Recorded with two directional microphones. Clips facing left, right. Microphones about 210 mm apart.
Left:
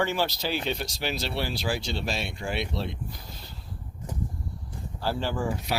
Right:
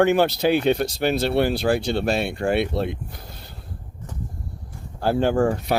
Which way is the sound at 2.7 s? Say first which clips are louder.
Right 7 dB; 55° right (ahead or behind).